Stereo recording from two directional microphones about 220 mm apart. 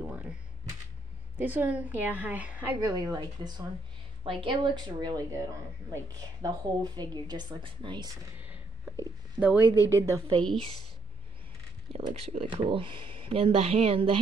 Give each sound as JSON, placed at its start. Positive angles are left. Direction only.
{"t": 1.4, "sound": "a woman's voice", "side_deg": -10}
{"t": 6.4, "sound": "speech", "side_deg": -20}
{"t": 8.4, "sound": "a sound", "side_deg": -5}
{"t": 9.0, "sound": "speech", "side_deg": -10}
{"t": 11.9, "sound": "speech", "side_deg": -25}